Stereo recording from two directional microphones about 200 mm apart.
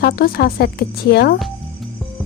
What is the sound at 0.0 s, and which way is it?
A woman's voice, 50° left (ahead or behind).